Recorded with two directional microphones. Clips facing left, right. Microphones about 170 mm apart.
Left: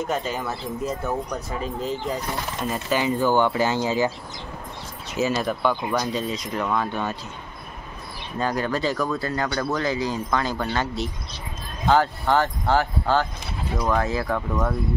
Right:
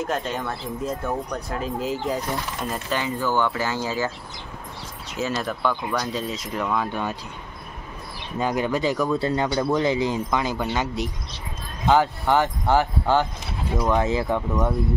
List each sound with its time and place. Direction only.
0.0 s speech: centre (ahead or behind)
2.6 s speech: 5° left (ahead or behind)
3.2 s speech: 20° left (ahead or behind)
5.1 s speech: 5° left (ahead or behind)
6.1 s speech: 5° right (ahead or behind)
8.4 s speech: 15° right (ahead or behind)